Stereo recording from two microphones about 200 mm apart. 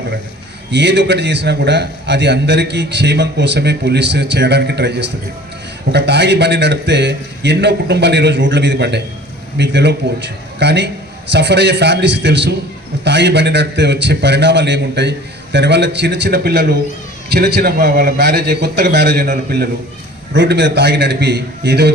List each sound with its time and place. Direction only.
0.7 s a man's voice: 60° right (ahead or behind)